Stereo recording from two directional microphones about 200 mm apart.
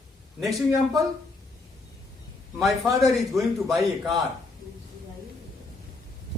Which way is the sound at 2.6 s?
Centre (ahead or behind).